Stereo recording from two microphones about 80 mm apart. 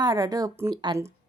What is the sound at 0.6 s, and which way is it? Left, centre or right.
Speech, right.